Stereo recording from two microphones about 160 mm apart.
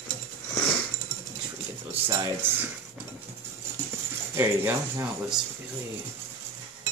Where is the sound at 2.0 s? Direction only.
10° right (ahead or behind).